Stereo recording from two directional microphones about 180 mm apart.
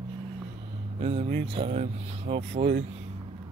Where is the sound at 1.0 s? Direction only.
35° right (ahead or behind).